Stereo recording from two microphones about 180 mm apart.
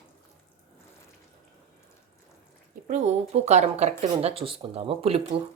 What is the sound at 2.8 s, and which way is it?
Speech, 40° right (ahead or behind).